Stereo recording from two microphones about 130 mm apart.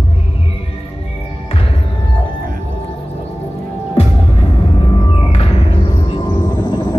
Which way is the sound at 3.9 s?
50° left (ahead or behind).